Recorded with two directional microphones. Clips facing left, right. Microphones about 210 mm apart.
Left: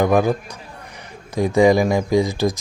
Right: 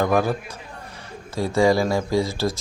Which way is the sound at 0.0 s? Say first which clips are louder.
Left 4 dB; 15° left (ahead or behind).